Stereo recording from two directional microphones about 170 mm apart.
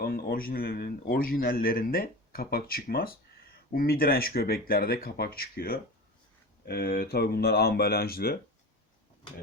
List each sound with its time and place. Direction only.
0.0 s a man's voice: 60° left (ahead or behind)